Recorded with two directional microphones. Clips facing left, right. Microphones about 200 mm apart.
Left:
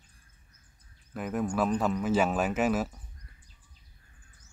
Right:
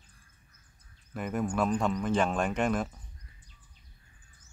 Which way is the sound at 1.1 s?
Centre (ahead or behind).